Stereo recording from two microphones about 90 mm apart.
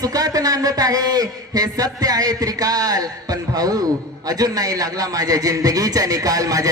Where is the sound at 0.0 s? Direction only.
45° right (ahead or behind).